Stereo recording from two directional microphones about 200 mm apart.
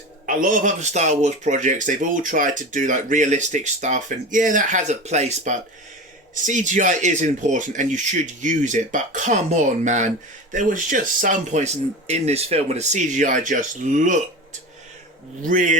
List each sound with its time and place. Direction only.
0.3 s speech: 40° right (ahead or behind)
15.4 s speech: 40° right (ahead or behind)